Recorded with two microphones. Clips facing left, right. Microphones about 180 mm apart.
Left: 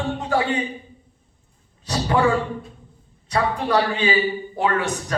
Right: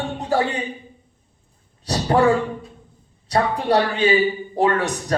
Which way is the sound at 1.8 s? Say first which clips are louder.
Right 2 dB; 35° right (ahead or behind).